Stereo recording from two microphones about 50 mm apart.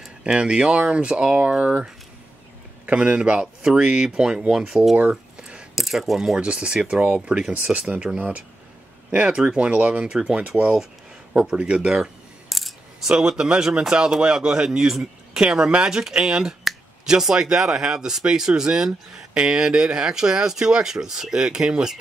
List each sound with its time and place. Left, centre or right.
0.2 s speech: centre
1.4 s speech: right
2.9 s speech: centre
6.4 s speech: right
7.9 s speech: right
11.5 s speech: right
12.4 s coin: centre
13.1 s speech: centre